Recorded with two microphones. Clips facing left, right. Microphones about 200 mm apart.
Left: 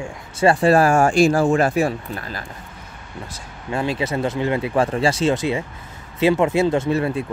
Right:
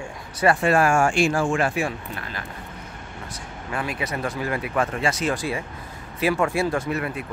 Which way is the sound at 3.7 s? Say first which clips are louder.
Left 6 dB; 25° left (ahead or behind).